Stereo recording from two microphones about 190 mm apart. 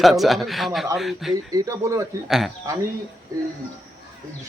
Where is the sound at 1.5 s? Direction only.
20° right (ahead or behind).